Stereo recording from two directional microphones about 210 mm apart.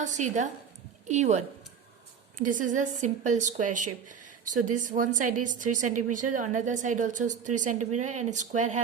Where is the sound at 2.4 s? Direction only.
40° right (ahead or behind).